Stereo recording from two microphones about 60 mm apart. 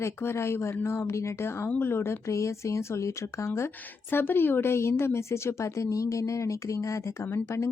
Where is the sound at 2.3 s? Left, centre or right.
Left.